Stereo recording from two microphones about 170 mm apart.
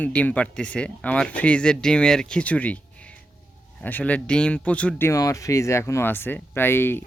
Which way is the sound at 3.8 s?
10° left (ahead or behind).